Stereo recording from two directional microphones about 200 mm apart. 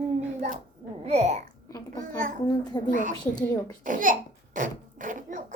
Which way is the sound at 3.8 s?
40° right (ahead or behind).